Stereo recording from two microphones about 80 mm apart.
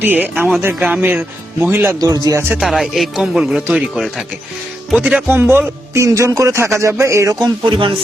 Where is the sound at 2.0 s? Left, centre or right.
Right.